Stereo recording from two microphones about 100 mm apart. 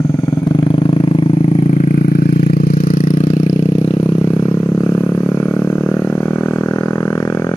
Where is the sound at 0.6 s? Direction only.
55° left (ahead or behind).